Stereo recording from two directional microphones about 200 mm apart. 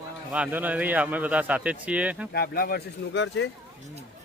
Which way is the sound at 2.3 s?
50° left (ahead or behind).